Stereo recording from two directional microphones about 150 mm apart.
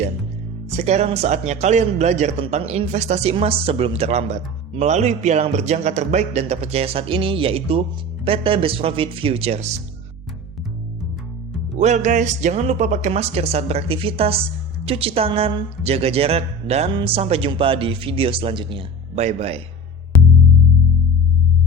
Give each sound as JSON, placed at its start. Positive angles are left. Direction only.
{"t": 0.8, "sound": "a man's voice", "side_deg": -45}
{"t": 11.8, "sound": "a man's voice", "side_deg": -50}